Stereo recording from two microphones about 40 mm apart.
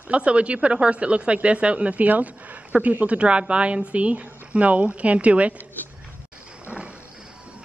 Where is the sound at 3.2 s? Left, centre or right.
Right.